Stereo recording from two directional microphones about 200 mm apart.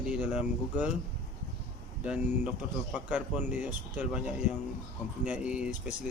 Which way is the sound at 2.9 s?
5° right (ahead or behind).